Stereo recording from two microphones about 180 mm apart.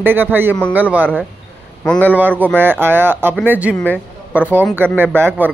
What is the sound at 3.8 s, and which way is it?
Speech, 10° left (ahead or behind).